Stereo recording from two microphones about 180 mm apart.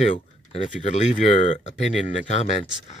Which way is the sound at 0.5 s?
40° left (ahead or behind).